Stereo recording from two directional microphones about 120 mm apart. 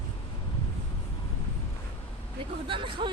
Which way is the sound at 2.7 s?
45° right (ahead or behind).